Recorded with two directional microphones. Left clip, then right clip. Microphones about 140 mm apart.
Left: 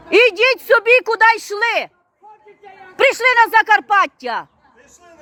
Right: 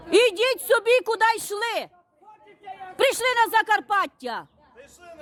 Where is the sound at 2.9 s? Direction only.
20° right (ahead or behind).